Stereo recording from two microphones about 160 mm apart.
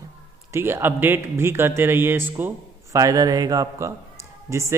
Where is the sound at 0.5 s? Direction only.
15° right (ahead or behind).